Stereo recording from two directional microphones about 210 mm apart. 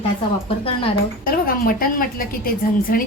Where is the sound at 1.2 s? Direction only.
45° left (ahead or behind).